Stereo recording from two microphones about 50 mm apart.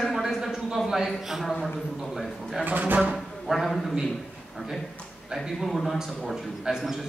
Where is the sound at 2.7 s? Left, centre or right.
Right.